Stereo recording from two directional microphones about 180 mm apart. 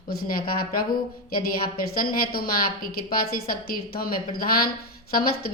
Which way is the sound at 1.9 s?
55° left (ahead or behind).